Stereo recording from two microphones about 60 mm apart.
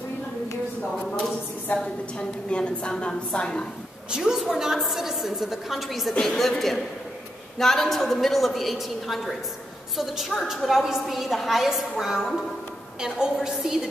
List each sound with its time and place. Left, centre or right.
1.8 s a woman's voice: centre
4.1 s a woman's voice: centre